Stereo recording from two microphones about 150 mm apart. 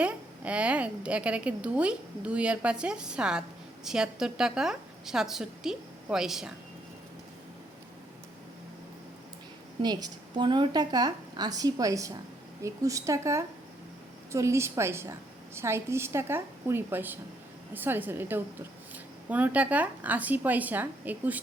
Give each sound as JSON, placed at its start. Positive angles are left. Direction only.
{"t": 0.0, "sound": "a woman's voice", "side_deg": -10}
{"t": 9.8, "sound": "a woman's voice", "side_deg": -30}